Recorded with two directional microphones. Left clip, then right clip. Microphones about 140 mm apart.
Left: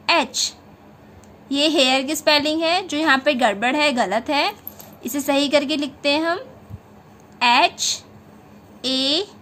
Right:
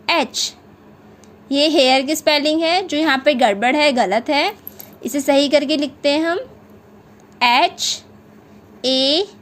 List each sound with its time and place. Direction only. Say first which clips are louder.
0.0 s a child's voice: right 1 dB; 25° right (ahead or behind)